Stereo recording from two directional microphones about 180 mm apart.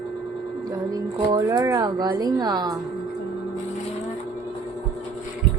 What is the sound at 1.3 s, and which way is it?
Speech, 20° right (ahead or behind).